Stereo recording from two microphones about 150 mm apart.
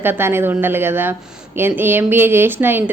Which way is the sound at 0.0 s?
15° right (ahead or behind).